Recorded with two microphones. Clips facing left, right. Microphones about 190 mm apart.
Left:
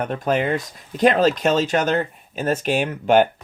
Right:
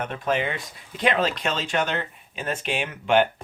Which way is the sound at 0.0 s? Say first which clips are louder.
Left 4 dB; 45° left (ahead or behind).